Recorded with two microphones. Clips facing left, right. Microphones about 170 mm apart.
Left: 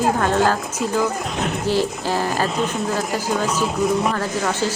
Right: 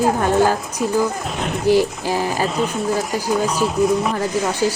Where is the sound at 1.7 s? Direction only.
15° right (ahead or behind).